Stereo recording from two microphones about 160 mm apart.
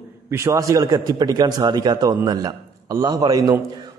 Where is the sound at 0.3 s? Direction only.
20° right (ahead or behind).